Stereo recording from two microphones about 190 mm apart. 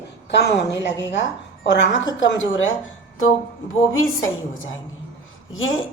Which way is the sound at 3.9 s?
90° left.